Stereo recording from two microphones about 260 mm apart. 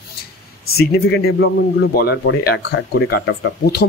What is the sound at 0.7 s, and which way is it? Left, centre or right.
Speech, left.